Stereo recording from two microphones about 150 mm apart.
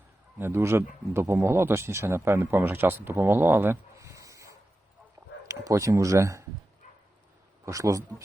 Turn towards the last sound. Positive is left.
turn(degrees=-20)  # may be behind; listen again after turning